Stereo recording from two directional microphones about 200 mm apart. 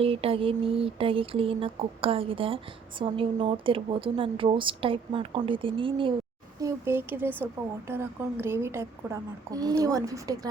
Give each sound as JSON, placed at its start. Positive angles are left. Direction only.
{"t": 0.0, "sound": "a woman's voice", "side_deg": -30}
{"t": 6.6, "sound": "a woman's voice", "side_deg": -15}